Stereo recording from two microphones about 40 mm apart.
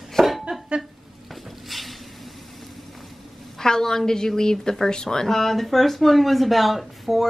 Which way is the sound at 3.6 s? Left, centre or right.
Centre.